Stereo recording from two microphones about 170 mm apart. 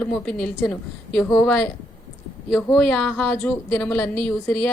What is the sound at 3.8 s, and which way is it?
Speech, 10° left (ahead or behind).